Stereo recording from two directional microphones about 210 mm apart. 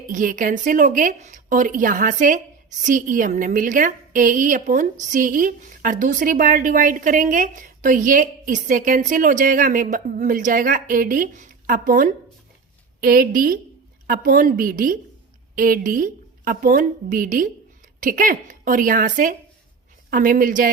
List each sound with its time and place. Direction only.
0.1 s a woman's voice: 40° right (ahead or behind)